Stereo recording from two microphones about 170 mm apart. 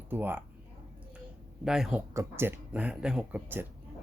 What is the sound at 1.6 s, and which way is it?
Speech, 5° right (ahead or behind).